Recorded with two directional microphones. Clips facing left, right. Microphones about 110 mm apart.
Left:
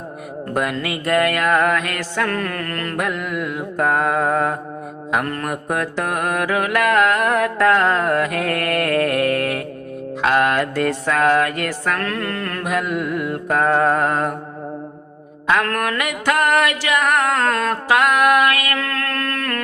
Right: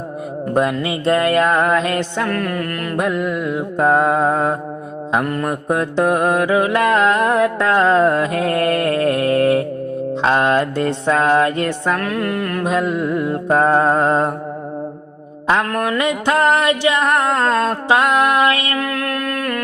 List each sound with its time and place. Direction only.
0.5 s mantra: 25° right (ahead or behind)
2.3 s music: 5° right (ahead or behind)
3.0 s mantra: 20° right (ahead or behind)
12.0 s music: 10° right (ahead or behind)
12.6 s mantra: 25° right (ahead or behind)
15.6 s mantra: 20° right (ahead or behind)
18.8 s music: 15° right (ahead or behind)